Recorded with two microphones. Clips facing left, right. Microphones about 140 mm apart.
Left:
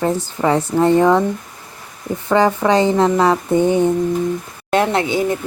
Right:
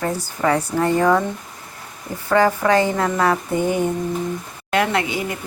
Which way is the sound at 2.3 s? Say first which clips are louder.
Left 2 dB; 20° left (ahead or behind).